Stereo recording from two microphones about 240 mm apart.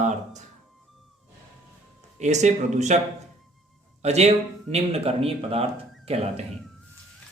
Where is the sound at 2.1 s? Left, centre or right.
Right.